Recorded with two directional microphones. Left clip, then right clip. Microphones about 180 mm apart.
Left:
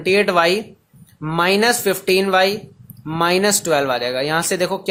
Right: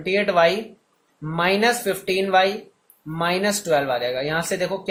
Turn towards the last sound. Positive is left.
turn(degrees=45)  # may be behind; listen again after turning